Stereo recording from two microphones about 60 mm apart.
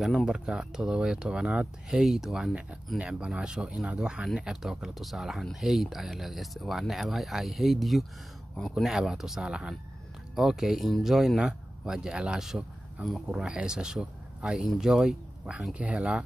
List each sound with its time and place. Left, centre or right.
0.0 s speech: centre